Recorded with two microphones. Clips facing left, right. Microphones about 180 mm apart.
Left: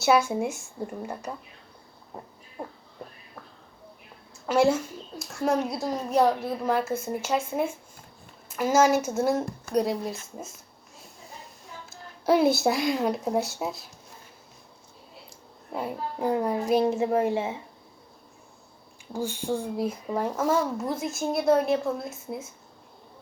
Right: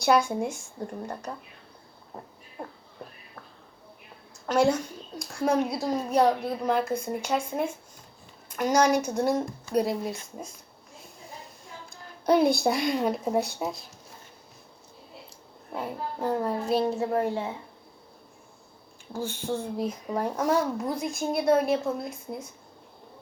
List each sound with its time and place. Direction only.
0.0 s a woman's voice: 5° left (ahead or behind)
2.6 s a woman's voice: centre (ahead or behind)
4.4 s a woman's voice: 5° left (ahead or behind)
11.9 s speech: 5° left (ahead or behind)
15.7 s a woman's voice: 10° left (ahead or behind)
19.1 s a woman's voice: 10° left (ahead or behind)